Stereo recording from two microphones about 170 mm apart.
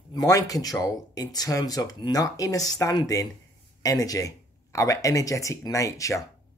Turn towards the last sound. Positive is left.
turn(degrees=20)  # may be behind; listen again after turning